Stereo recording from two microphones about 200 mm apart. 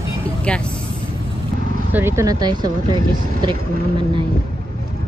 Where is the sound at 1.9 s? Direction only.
10° right (ahead or behind).